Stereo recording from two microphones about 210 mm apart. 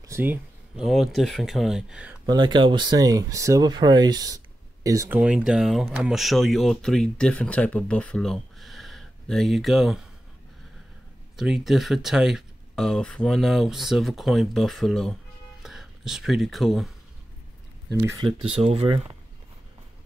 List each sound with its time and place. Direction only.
0.1 s speech: 10° right (ahead or behind)
2.2 s speech: 20° right (ahead or behind); by 10.0 s centre (ahead or behind)
11.3 s speech: centre (ahead or behind)
18.6 s speech: 30° right (ahead or behind)